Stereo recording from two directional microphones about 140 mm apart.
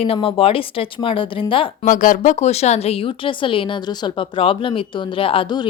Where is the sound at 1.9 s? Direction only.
70° left (ahead or behind).